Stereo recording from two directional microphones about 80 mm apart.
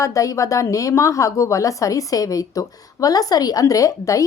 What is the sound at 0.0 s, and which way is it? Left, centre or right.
A woman's voice, left.